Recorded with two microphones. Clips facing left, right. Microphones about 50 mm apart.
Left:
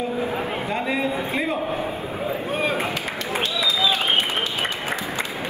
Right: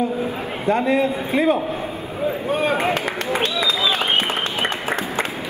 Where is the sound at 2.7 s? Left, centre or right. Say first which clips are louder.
Right 5 dB; right.